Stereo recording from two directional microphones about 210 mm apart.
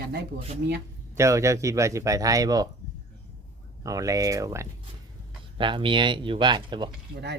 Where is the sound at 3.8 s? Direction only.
15° right (ahead or behind).